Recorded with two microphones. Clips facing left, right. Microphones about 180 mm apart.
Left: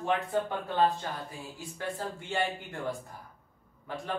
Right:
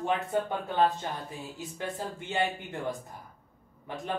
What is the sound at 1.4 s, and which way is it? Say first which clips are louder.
Speech: right 2 dB; 20° right (ahead or behind).